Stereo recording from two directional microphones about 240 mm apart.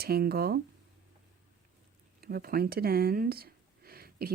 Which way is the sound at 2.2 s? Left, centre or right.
Right.